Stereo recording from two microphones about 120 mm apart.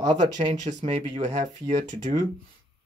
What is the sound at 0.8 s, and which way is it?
Speech, 55° right (ahead or behind).